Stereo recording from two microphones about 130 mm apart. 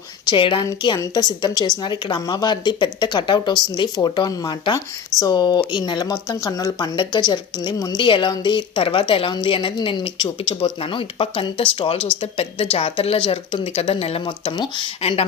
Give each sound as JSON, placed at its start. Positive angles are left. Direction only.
{"t": 0.3, "sound": "speech", "side_deg": 40}